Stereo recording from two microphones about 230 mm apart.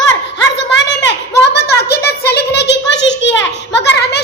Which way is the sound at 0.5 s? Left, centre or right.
Left.